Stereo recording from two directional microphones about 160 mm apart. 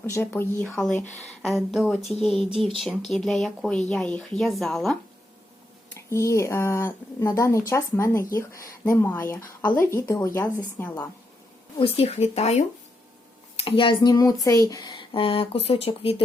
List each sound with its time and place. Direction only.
0.0 s speech: 15° left (ahead or behind)
1.4 s speech: centre (ahead or behind)
6.1 s speech: 15° left (ahead or behind)
9.6 s speech: 60° left (ahead or behind)
9.9 s speech: 20° left (ahead or behind)
11.8 s speech: 35° left (ahead or behind)